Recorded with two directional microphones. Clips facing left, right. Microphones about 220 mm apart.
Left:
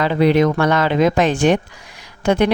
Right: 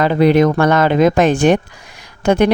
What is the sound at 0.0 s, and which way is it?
Speech, 45° right (ahead or behind).